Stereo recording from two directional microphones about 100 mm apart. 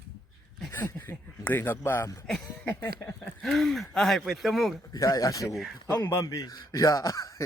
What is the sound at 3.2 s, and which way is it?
Speech, 5° left (ahead or behind).